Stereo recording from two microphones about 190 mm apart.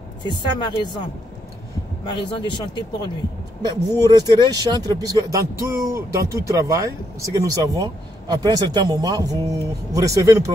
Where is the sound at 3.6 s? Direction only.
20° right (ahead or behind).